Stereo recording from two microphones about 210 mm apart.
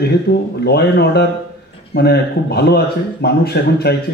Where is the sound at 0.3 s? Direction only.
50° left (ahead or behind).